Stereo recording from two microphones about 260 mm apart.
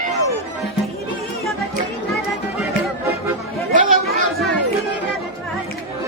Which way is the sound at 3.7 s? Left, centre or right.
Right.